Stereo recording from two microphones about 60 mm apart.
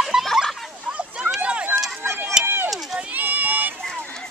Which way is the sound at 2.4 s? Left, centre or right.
Right.